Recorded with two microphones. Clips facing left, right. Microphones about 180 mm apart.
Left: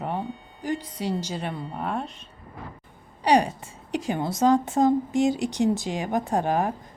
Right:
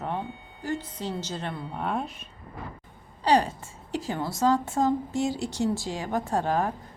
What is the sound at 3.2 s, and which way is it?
A woman's voice, 15° left (ahead or behind).